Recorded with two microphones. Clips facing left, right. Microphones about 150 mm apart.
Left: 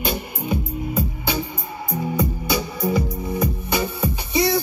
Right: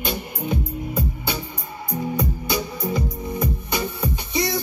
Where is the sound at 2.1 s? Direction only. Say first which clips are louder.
Left 4 dB; 5° left (ahead or behind).